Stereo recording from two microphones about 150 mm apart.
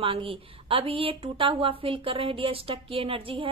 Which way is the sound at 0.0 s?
35° right (ahead or behind).